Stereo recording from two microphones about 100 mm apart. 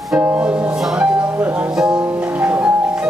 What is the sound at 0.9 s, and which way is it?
Music, 15° right (ahead or behind).